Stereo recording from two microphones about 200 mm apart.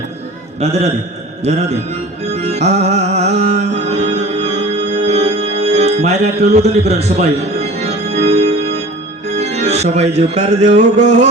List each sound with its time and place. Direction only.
0.6 s a man's voice: 30° right (ahead or behind)
1.5 s music: 35° right (ahead or behind)
6.5 s organ: 30° right (ahead or behind)
9.3 s music: 35° right (ahead or behind)